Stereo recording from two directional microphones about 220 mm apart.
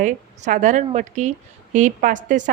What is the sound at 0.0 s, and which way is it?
Speech, 35° right (ahead or behind).